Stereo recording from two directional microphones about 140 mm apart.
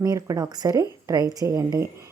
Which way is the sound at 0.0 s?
25° right (ahead or behind).